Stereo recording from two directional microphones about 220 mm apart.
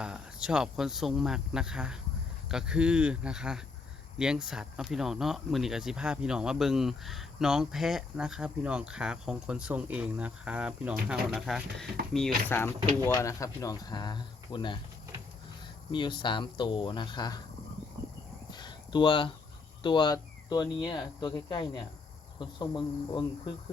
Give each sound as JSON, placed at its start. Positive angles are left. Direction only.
{"t": 0.0, "sound": "speech", "side_deg": -5}
{"t": 15.9, "sound": "speech", "side_deg": 20}
{"t": 18.5, "sound": "a sound", "side_deg": 20}
{"t": 19.8, "sound": "speech", "side_deg": 20}